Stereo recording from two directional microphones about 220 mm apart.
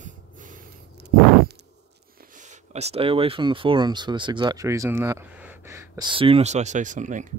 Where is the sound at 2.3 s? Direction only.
30° right (ahead or behind).